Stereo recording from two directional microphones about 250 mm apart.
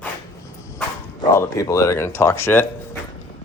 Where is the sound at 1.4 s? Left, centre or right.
Centre.